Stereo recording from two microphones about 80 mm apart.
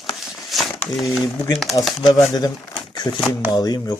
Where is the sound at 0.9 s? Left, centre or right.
Centre.